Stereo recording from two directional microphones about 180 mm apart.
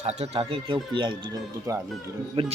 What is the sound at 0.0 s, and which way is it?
Speech, 35° right (ahead or behind).